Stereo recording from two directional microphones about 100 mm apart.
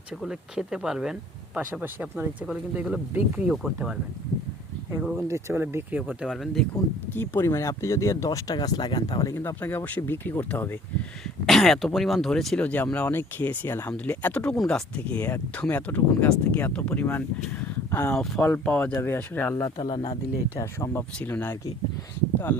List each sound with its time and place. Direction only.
0.2 s speech: 5° right (ahead or behind)
5.1 s speech: 25° right (ahead or behind)
6.2 s speech: centre (ahead or behind)
7.1 s speech: 20° left (ahead or behind); by 9.3 s 40° left (ahead or behind)
9.3 s speech: 25° left (ahead or behind)
11.4 s speech: centre (ahead or behind)
12.6 s speech: 15° left (ahead or behind)
18.1 s speech: 10° left (ahead or behind)
19.7 s speech: 50° left (ahead or behind)
20.6 s speech: 35° left (ahead or behind)
20.9 s speech: 20° left (ahead or behind)